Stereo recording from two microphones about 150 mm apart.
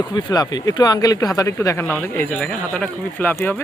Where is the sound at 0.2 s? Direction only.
25° left (ahead or behind).